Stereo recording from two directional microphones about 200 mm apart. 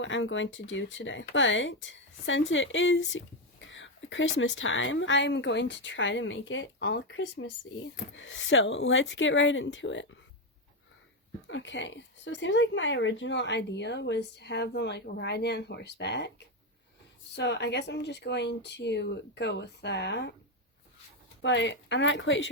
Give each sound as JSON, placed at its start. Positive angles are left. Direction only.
{"t": 0.0, "sound": "speech", "side_deg": 70}
{"t": 11.4, "sound": "speech", "side_deg": 65}
{"t": 17.3, "sound": "speech", "side_deg": 60}
{"t": 21.4, "sound": "speech", "side_deg": 60}